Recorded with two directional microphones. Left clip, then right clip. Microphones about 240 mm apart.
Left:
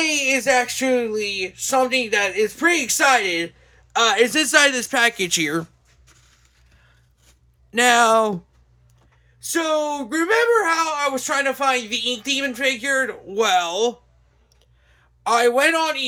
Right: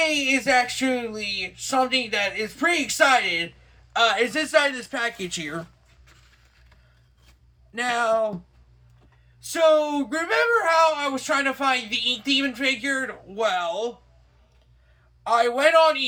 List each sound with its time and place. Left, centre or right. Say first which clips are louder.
0.0 s speech: left 2 dB; left
7.7 s speech: left 8 dB; left
9.4 s speech: right 3 dB; left
15.2 s speech: left 3 dB; left